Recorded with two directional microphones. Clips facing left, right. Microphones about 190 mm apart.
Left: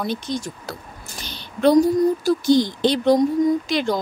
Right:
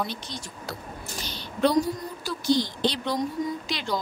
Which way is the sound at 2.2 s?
50° left (ahead or behind).